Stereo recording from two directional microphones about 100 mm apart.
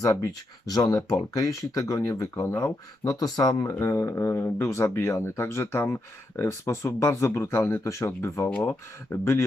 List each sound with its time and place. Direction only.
0.0 s speech: 35° left (ahead or behind)
8.4 s speech: 20° left (ahead or behind)